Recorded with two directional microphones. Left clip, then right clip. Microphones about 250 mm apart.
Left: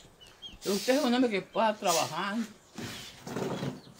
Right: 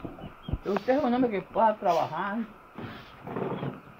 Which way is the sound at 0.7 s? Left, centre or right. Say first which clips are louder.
Right 2 dB; centre.